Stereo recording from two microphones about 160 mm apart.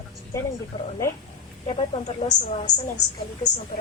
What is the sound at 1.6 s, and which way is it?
A woman's voice, 40° left (ahead or behind).